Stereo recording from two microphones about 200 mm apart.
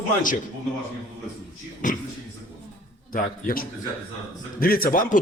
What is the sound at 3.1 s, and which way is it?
A man's voice, 45° left (ahead or behind).